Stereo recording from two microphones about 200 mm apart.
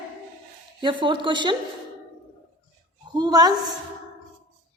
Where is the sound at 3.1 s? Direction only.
20° right (ahead or behind).